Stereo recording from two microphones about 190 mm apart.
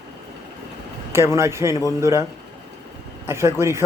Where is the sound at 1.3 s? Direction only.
15° right (ahead or behind).